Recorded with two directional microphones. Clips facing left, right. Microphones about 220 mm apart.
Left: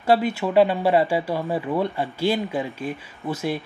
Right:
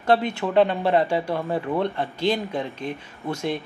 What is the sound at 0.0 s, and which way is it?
Speech, 5° left (ahead or behind).